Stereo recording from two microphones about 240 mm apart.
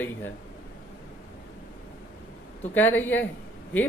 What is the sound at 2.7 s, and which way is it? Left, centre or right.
Speech, centre.